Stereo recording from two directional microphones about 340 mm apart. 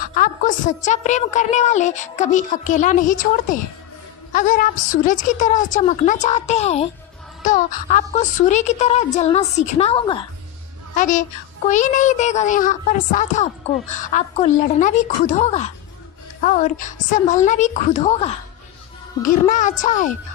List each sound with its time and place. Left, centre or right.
0.0 s a woman's voice: left